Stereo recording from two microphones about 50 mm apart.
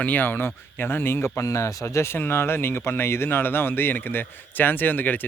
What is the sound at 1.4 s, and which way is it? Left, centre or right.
Speech, left.